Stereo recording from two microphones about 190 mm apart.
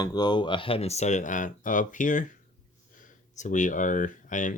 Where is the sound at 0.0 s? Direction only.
20° left (ahead or behind).